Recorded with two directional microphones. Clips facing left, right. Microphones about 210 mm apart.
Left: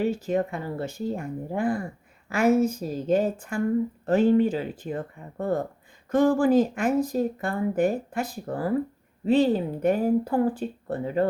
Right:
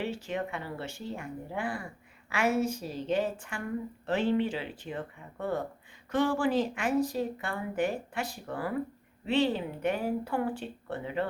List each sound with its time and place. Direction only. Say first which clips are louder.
0.0 s speech: left 9 dB; 40° left (ahead or behind)